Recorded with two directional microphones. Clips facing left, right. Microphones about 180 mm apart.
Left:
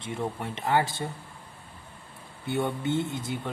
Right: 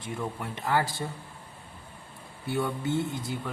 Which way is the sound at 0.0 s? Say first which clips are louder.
Left 2 dB; 25° left (ahead or behind).